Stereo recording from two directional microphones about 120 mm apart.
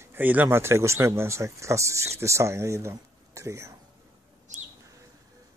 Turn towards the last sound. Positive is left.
turn(degrees=-25)  # may be behind; listen again after turning